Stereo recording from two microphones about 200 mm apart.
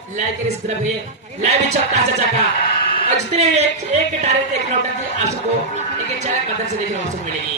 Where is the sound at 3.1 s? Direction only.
35° right (ahead or behind).